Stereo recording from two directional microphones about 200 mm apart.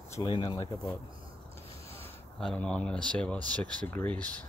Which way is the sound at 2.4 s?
5° left (ahead or behind).